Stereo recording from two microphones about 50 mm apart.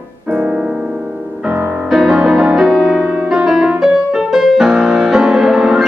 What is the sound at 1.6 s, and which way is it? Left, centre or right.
Music, right.